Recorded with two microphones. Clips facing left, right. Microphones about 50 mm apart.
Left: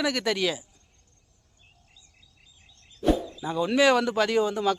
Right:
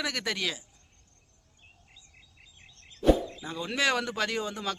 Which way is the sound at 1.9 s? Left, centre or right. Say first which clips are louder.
Right 2 dB; right.